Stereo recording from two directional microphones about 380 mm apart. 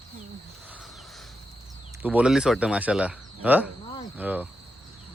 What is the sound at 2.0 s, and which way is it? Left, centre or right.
Speech, centre.